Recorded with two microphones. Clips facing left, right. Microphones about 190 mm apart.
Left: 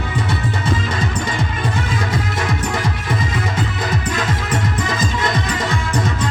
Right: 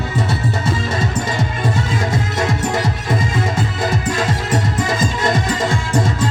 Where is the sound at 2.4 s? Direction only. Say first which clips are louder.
Right 3 dB; 25° right (ahead or behind).